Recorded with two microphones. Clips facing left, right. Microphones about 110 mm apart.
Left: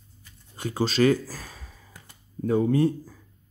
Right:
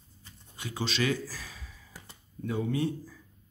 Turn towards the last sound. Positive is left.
turn(degrees=45)  # may be behind; listen again after turning